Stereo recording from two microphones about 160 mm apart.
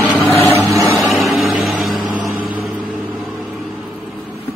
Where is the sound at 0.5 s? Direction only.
20° right (ahead or behind).